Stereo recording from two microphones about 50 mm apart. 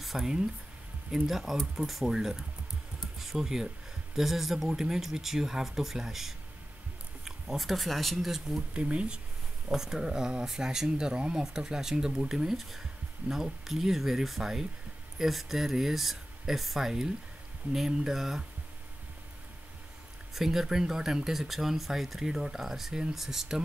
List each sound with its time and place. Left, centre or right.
0.0 s a sound: centre
1.1 s speech: centre
8.5 s speech: right
9.7 s speech: centre
20.3 s speech: centre